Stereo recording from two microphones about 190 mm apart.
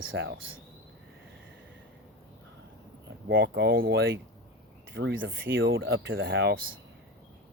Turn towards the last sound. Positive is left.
turn(degrees=-80)